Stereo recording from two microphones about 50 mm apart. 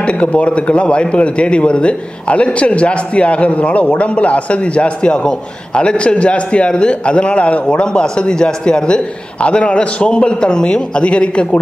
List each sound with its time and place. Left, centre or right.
0.0 s a man's voice: left